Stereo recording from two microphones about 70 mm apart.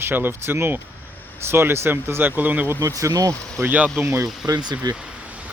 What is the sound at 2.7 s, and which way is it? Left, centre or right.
Speech, right.